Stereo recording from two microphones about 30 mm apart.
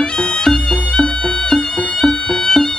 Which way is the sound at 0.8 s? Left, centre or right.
Left.